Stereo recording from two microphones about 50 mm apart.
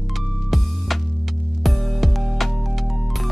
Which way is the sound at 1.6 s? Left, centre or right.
Centre.